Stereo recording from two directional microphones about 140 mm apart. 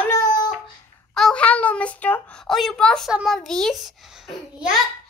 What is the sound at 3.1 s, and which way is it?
A child's voice, centre (ahead or behind).